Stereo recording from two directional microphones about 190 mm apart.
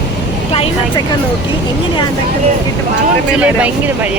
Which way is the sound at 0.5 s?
30° left (ahead or behind).